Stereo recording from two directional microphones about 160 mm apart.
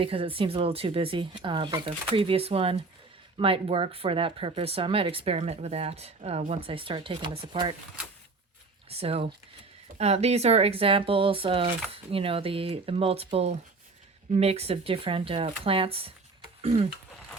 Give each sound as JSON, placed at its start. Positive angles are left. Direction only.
{"t": 0.0, "sound": "speech", "side_deg": -35}
{"t": 8.9, "sound": "speech", "side_deg": -40}